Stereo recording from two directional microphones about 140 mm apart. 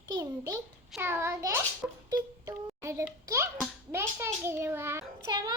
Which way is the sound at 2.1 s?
20° right (ahead or behind).